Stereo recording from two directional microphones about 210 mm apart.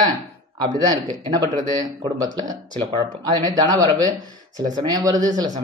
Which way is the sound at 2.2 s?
20° right (ahead or behind).